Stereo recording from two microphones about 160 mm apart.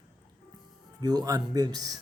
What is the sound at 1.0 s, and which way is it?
Speech, 25° right (ahead or behind).